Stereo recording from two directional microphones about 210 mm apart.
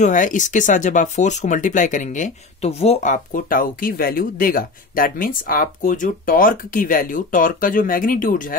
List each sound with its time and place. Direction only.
0.0 s speech: 40° left (ahead or behind)